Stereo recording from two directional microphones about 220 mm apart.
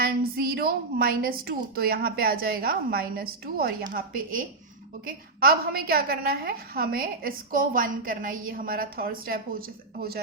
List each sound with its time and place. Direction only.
0.0 s a woman's voice: 45° right (ahead or behind)